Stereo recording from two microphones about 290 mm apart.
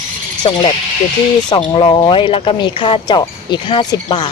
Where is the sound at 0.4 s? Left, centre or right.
Centre.